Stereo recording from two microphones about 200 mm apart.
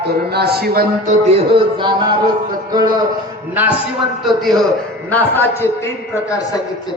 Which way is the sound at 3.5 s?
10° right (ahead or behind).